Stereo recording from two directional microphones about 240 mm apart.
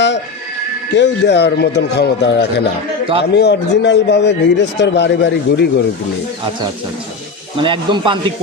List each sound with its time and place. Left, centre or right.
0.9 s speech: left
7.5 s speech: right